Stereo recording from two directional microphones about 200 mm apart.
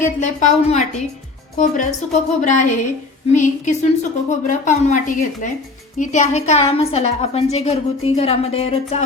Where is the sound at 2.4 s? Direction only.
35° left (ahead or behind).